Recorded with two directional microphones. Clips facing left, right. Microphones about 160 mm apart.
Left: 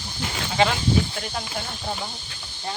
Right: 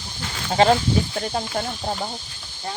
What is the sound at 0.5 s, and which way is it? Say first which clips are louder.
Speech: right 4 dB; 40° right (ahead or behind).